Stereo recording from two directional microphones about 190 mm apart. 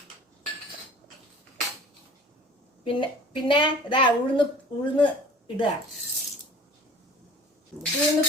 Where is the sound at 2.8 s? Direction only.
25° left (ahead or behind).